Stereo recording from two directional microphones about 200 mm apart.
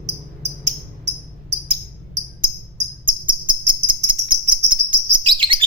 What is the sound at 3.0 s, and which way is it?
Cricket, 25° right (ahead or behind).